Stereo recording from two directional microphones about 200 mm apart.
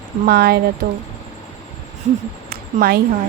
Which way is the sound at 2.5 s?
50° right (ahead or behind).